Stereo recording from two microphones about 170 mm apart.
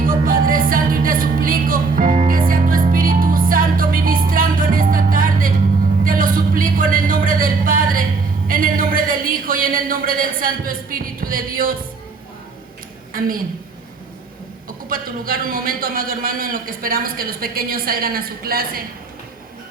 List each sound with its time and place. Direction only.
0.0 s music: 55° right (ahead or behind)
6.1 s a sound: 55° right (ahead or behind)
13.1 s a woman's voice: 55° right (ahead or behind)
14.8 s a man's voice: 55° right (ahead or behind)